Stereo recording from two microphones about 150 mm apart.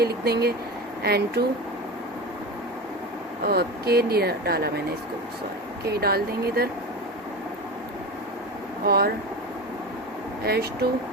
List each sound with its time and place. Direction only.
0.0 s speech: 90° right
3.4 s speech: 90° right
5.9 s speech: 90° right
8.9 s speech: 90° right
10.4 s speech: 90° right